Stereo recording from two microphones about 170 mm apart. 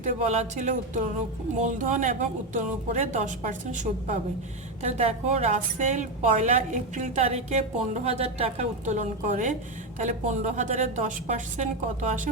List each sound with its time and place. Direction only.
0.0 s a woman's voice: 40° right (ahead or behind)